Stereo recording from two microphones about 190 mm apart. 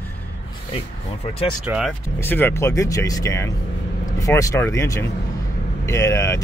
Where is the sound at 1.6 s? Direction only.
5° right (ahead or behind).